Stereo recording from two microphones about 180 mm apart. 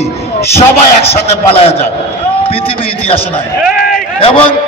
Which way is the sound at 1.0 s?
35° left (ahead or behind).